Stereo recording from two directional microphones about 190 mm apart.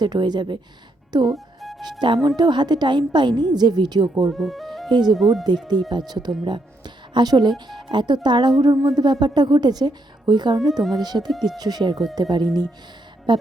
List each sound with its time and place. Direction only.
0.0 s a woman's voice: 20° right (ahead or behind)
1.3 s music: centre (ahead or behind)
1.8 s a woman's voice: 25° right (ahead or behind)
4.3 s music: centre (ahead or behind)
4.9 s a woman's voice: 20° right (ahead or behind)
5.1 s speech: centre (ahead or behind)
6.1 s a woman's voice: 20° right (ahead or behind)
11.3 s speech: centre (ahead or behind)
11.6 s a woman's voice: 20° right (ahead or behind)